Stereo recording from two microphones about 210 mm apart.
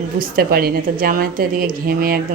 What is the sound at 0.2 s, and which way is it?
A woman's voice, 45° right (ahead or behind).